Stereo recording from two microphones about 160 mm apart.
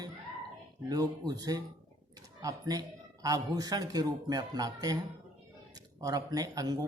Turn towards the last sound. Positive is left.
turn(degrees=-25)  # may be behind; listen again after turning